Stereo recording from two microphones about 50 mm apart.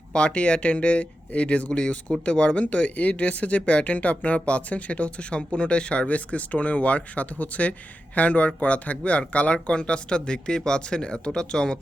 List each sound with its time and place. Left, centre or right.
0.1 s speech: centre